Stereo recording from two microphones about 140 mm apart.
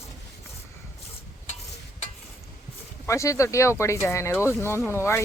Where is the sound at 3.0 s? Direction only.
20° left (ahead or behind).